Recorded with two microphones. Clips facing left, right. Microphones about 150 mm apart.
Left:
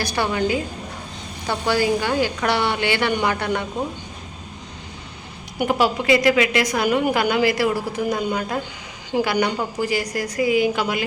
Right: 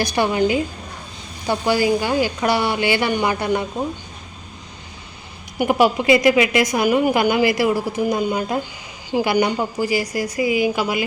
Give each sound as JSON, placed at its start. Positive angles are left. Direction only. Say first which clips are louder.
{"t": 0.0, "sound": "a woman's voice", "louder": "right 4 dB", "side_deg": -15}
{"t": 5.5, "sound": "a woman's voice", "louder": "right 3 dB", "side_deg": -15}